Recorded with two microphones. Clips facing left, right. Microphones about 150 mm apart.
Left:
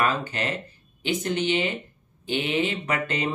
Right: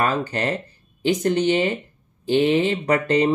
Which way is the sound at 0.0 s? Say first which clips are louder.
Right 4 dB; 40° right (ahead or behind).